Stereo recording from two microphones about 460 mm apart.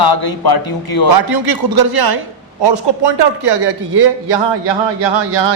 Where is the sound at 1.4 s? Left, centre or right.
Right.